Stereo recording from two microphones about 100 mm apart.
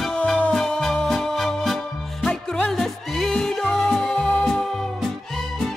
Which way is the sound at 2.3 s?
15° left (ahead or behind).